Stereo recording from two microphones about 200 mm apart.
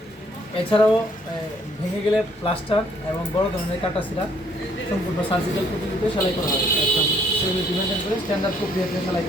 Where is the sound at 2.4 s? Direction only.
30° left (ahead or behind).